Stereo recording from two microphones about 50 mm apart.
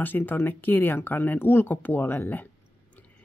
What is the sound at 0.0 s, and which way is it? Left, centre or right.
Speech, left.